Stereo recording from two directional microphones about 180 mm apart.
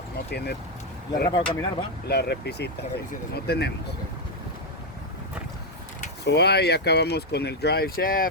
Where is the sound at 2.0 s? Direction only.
65° left (ahead or behind).